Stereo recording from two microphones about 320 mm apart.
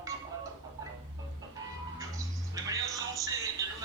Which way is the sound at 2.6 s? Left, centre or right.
Centre.